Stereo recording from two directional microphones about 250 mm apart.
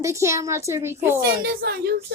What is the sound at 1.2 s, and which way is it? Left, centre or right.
Speech, right.